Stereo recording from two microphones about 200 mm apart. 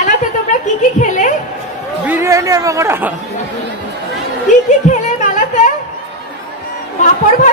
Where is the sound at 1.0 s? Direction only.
40° left (ahead or behind).